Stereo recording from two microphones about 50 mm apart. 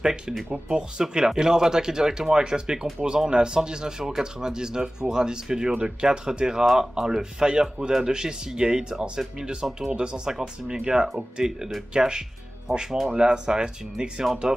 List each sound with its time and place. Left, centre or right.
0.5 s speech: centre
12.7 s speech: centre
13.1 s speech: centre